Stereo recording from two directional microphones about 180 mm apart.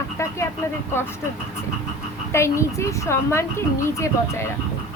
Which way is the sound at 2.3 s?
15° left (ahead or behind).